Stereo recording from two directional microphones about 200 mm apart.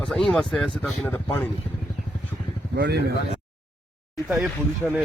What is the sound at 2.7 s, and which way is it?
Speech, 55° right (ahead or behind).